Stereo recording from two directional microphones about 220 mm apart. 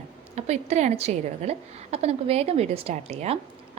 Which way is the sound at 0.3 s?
30° right (ahead or behind).